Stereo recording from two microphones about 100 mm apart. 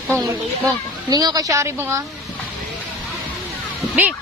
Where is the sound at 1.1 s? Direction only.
40° right (ahead or behind).